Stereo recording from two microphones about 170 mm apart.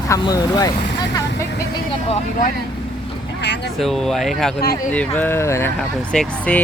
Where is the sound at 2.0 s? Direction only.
40° left (ahead or behind).